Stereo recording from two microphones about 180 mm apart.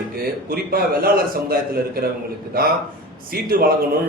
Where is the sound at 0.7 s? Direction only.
55° right (ahead or behind).